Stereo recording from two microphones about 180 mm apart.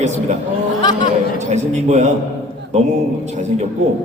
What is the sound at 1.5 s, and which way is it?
Speech, 40° right (ahead or behind).